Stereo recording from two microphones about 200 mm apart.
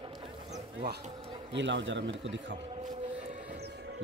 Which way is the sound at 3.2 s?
35° right (ahead or behind).